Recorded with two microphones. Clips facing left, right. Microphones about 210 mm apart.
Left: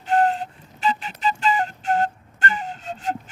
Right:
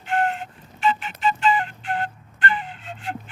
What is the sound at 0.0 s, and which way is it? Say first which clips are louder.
Flute: left 4 dB; 40° left (ahead or behind).